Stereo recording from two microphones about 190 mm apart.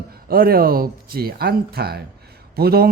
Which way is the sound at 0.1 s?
50° right (ahead or behind).